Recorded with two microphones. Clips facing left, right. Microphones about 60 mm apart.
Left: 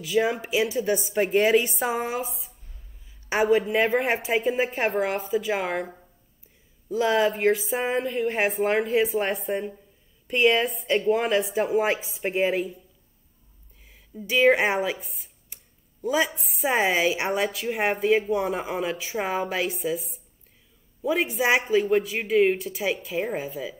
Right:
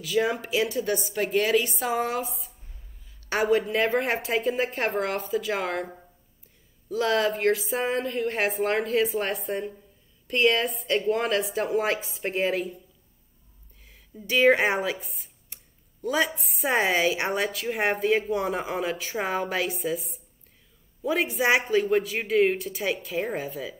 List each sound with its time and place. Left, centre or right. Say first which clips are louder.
0.0 s a woman's voice: left 1 dB; centre
0.9 s a woman's voice: left 5 dB; left
2.0 s a woman's voice: right 1 dB; centre
13.8 s a woman's voice: left 1 dB; centre